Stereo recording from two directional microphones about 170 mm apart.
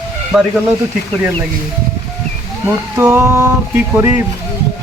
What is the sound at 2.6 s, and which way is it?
Speech, 10° right (ahead or behind).